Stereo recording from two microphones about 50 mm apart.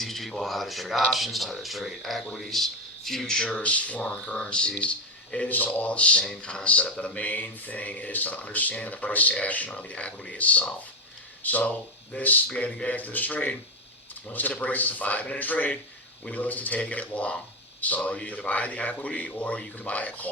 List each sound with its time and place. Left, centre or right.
0.0 s speech: centre
2.2 s speech: centre
3.5 s a man's voice: left